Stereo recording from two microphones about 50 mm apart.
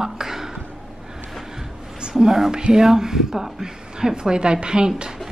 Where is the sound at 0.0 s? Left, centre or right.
Centre.